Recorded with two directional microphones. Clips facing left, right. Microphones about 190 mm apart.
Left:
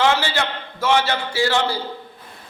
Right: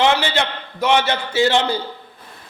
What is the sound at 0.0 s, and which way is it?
A man's voice, 20° right (ahead or behind).